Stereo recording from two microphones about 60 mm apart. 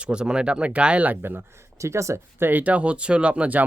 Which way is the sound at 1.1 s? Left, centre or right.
Right.